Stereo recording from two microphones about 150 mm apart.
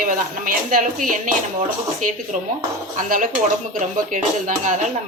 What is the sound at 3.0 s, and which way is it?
A woman's voice, 65° right (ahead or behind).